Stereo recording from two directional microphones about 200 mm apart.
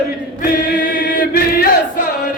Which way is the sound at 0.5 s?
45° left (ahead or behind).